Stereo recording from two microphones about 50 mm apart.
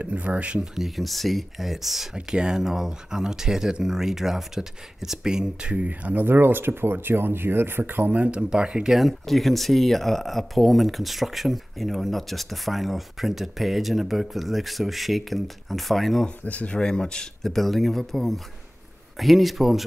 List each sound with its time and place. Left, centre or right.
0.0 s speech: right
0.7 s speech: centre
2.1 s speech: centre
5.9 s speech: right
8.1 s speech: right
8.9 s speech: centre
16.4 s speech: left; by 19.8 s centre